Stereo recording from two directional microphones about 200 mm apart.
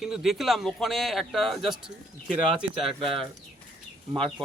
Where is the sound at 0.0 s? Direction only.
Centre (ahead or behind).